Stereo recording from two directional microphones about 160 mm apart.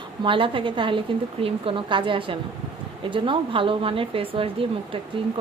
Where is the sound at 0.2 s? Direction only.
30° right (ahead or behind).